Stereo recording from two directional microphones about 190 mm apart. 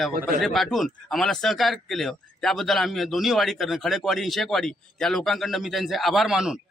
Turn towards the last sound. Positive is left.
turn(degrees=-5)  # may be behind; listen again after turning